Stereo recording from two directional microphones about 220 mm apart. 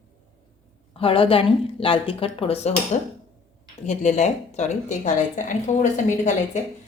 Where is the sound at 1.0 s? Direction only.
25° left (ahead or behind).